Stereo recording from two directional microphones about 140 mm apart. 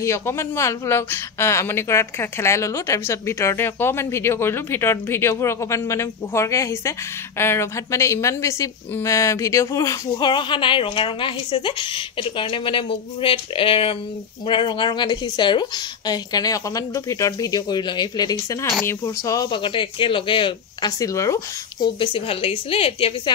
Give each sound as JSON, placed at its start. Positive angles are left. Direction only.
{"t": 0.0, "sound": "speech", "side_deg": 20}